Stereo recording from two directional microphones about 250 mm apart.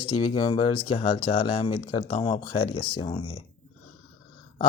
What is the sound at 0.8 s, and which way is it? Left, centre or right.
Speech, left.